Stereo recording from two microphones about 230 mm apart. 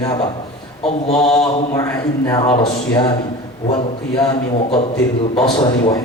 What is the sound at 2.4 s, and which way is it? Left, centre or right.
Mantra, left.